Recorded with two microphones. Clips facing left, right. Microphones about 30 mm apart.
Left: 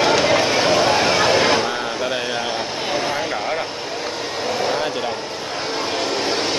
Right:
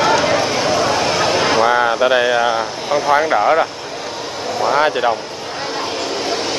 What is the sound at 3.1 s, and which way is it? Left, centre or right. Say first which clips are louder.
Vehicle: right 9 dB; right.